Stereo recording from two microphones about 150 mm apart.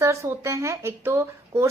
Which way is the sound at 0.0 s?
20° right (ahead or behind).